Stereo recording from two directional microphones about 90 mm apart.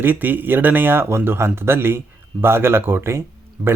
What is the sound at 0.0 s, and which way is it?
Speech, 20° right (ahead or behind).